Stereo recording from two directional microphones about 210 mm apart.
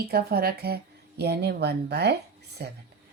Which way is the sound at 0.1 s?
45° right (ahead or behind).